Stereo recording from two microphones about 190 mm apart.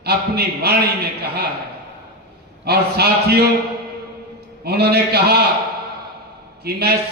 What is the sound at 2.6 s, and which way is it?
Speech, 55° right (ahead or behind).